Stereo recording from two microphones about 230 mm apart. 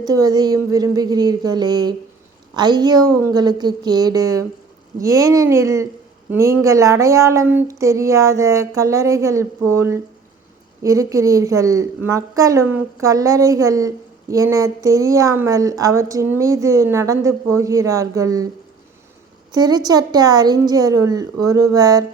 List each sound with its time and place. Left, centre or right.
0.0 s a woman's voice: centre
19.5 s a woman's voice: centre